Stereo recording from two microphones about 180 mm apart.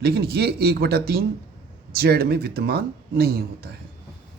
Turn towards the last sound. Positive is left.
turn(degrees=-60)  # may be behind; listen again after turning